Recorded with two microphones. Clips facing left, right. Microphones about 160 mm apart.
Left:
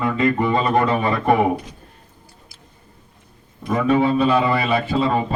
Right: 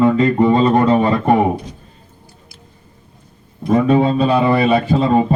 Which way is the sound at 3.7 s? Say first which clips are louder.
Right 4 dB; 30° right (ahead or behind).